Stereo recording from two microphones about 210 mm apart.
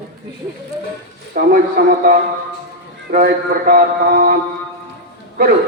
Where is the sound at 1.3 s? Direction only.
40° right (ahead or behind).